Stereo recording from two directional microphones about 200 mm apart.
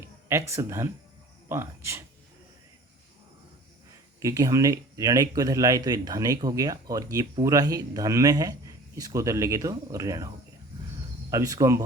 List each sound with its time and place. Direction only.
0.0 s speech: 15° right (ahead or behind)
4.2 s speech: 15° right (ahead or behind)